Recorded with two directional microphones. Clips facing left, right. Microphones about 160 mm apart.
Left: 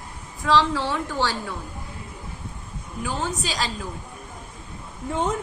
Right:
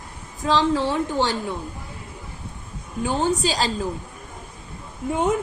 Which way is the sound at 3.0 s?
30° right (ahead or behind).